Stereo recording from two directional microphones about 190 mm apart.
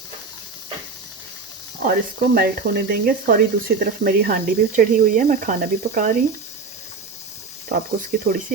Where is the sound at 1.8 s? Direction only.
55° right (ahead or behind).